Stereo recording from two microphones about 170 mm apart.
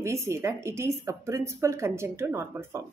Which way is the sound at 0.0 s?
15° right (ahead or behind).